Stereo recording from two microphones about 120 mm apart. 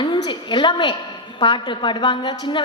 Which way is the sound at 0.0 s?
40° left (ahead or behind).